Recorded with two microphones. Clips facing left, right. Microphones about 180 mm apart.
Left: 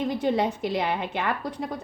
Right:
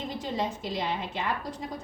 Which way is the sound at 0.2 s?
65° left (ahead or behind).